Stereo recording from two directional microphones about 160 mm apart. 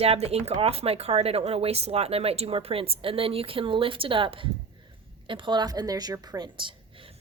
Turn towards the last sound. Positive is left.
turn(degrees=-30)  # may be behind; listen again after turning